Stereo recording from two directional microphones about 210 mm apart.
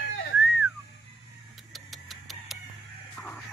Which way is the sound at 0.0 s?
60° left (ahead or behind).